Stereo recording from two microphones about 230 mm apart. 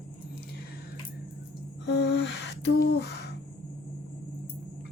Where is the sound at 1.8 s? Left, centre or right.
Left.